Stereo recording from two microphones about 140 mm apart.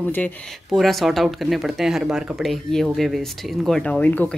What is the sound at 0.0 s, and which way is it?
Speech, 10° left (ahead or behind).